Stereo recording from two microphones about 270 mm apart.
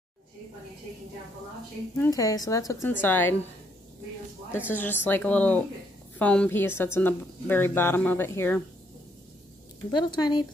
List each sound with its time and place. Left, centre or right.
2.0 s a woman's voice: centre
4.6 s a woman's voice: centre
9.8 s a woman's voice: centre